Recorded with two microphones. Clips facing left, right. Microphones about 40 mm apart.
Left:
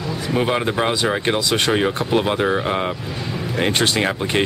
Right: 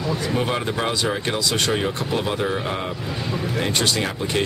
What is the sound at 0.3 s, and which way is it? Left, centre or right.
Speech, centre.